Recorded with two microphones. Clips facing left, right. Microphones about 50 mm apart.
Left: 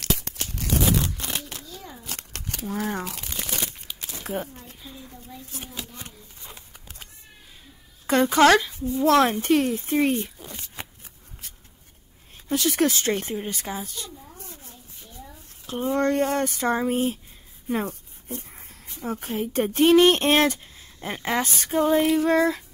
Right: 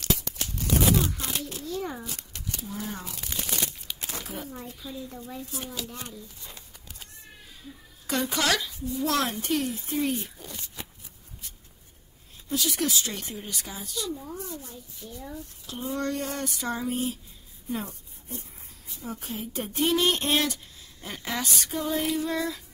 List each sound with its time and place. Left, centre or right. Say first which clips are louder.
0.6 s a sound: even; left
2.0 s crumpling: left 2 dB; left
4.2 s speech: left 5 dB; left
5.8 s speech: right 1 dB; left
8.1 s speech: left 10 dB; left
10.4 s a sound: left 2 dB; left
12.4 s speech: left 6 dB; left
15.6 s speech: left 8 dB; left
17.6 s a sound: left 6 dB; left
18.9 s speech: left 7 dB; left